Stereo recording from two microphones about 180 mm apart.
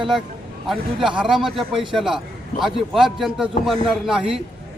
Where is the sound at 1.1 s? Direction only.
5° right (ahead or behind).